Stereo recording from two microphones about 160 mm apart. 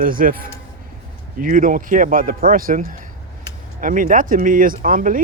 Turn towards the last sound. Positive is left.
turn(degrees=-60)  # may be behind; listen again after turning